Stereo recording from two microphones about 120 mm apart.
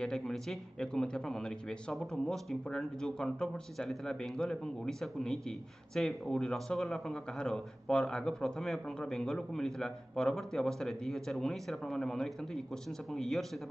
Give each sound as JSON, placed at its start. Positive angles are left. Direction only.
{"t": 0.0, "sound": "a man's voice", "side_deg": 5}